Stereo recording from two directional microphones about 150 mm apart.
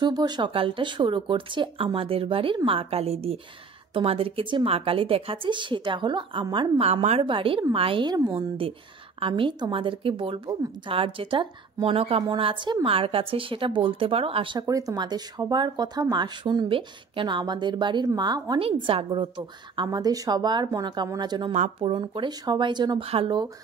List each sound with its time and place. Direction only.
0.0 s speech: 30° right (ahead or behind)
6.9 s a woman's voice: 45° right (ahead or behind)
7.2 s speech: 35° right (ahead or behind)
18.6 s a woman's voice: 40° right (ahead or behind)
21.5 s speech: 45° right (ahead or behind)